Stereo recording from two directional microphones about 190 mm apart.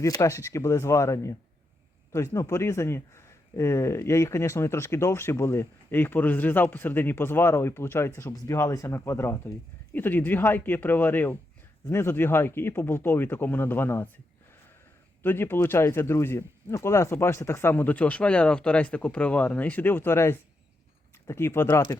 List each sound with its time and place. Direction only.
0.0 s speech: 15° left (ahead or behind)
15.2 s speech: 10° left (ahead or behind)